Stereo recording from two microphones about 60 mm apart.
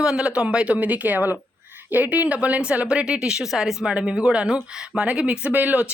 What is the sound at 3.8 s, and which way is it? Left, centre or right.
Speech, centre.